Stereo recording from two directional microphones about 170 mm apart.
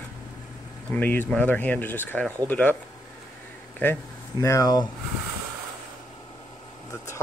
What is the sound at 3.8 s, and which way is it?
Speech, 15° left (ahead or behind).